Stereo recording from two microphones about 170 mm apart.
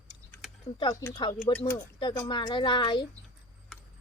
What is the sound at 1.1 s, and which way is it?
A woman's voice, 25° left (ahead or behind).